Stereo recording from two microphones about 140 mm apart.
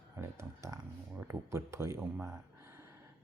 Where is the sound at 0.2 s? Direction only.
20° right (ahead or behind).